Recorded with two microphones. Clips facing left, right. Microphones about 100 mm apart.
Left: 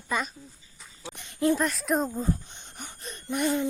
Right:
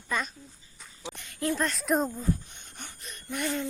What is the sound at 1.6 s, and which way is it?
Speech, 5° left (ahead or behind).